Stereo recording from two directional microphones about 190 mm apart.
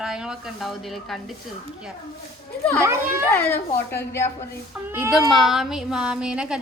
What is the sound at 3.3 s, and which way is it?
Speech, 10° left (ahead or behind).